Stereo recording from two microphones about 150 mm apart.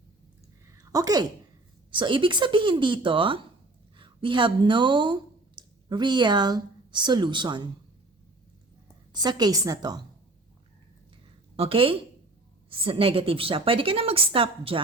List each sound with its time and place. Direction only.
0.7 s a sound: 25° right (ahead or behind)
1.9 s a woman's voice: 35° right (ahead or behind)
9.1 s a woman's voice: 25° right (ahead or behind)
11.5 s a woman's voice: 40° right (ahead or behind)